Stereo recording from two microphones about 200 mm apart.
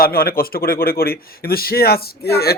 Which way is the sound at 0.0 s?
50° left (ahead or behind).